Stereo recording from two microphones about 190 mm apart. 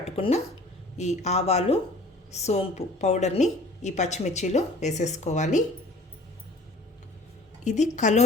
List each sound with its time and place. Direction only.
0.0 s a sound: 35° left (ahead or behind)
0.9 s a woman's voice: 35° left (ahead or behind)
7.6 s a woman's voice: 40° left (ahead or behind)